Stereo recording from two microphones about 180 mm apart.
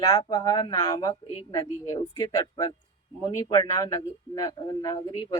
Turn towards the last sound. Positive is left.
turn(degrees=20)  # may be behind; listen again after turning